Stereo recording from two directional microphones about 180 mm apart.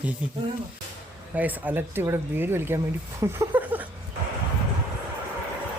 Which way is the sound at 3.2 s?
15° right (ahead or behind).